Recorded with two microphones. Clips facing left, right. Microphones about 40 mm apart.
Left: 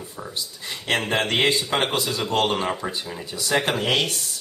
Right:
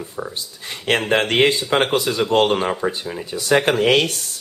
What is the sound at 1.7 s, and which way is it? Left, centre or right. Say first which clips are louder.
Speech: right 5 dB; right.